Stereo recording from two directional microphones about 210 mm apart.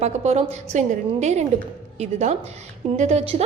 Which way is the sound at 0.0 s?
30° right (ahead or behind).